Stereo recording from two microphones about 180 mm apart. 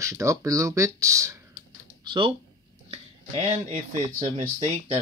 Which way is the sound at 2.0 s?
25° right (ahead or behind).